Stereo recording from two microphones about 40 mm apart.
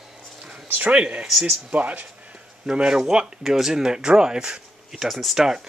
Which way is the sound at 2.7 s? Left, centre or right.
Right.